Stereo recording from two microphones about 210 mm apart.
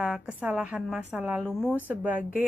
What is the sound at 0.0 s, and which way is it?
A woman's voice, 5° right (ahead or behind).